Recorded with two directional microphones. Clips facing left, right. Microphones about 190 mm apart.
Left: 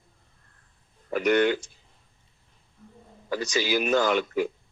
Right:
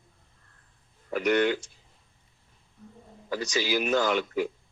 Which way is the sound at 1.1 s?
55° left (ahead or behind).